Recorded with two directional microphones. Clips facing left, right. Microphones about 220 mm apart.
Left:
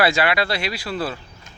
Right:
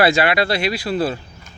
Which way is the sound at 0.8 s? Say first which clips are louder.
Right 6 dB; 20° right (ahead or behind).